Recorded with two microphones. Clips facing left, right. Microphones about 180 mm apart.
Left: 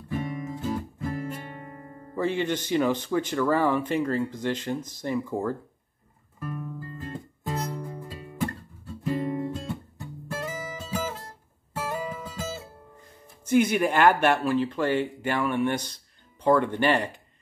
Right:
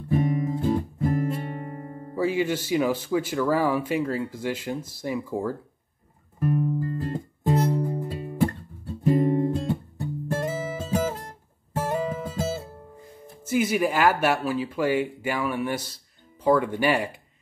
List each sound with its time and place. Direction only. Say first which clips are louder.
0.1 s guitar: right 7 dB; 35° right (ahead or behind)
2.1 s speech: right 2 dB; 5° right (ahead or behind)
6.4 s music: right 11 dB; 35° right (ahead or behind)
7.8 s music: right 9 dB; 20° right (ahead or behind)
9.0 s music: right 7 dB; 40° right (ahead or behind)
13.4 s speech: left 1 dB; 5° right (ahead or behind)